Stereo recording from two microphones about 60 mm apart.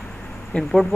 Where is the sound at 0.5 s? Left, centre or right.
Left.